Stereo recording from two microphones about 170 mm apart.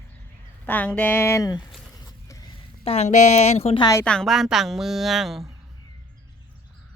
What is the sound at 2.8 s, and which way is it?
A woman's voice, 40° left (ahead or behind).